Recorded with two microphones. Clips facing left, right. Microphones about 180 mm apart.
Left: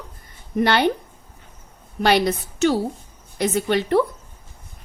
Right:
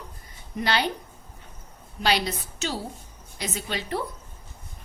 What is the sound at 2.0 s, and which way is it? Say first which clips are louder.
A woman's voice: left 7 dB; 55° left (ahead or behind).